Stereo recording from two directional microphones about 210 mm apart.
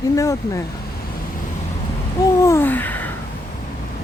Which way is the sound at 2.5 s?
10° left (ahead or behind).